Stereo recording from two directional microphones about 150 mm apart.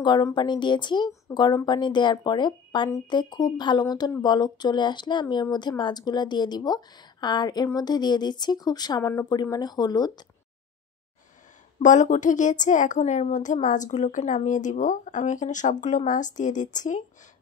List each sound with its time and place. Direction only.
0.0 s speech: 30° left (ahead or behind)
11.8 s a woman's voice: 55° left (ahead or behind)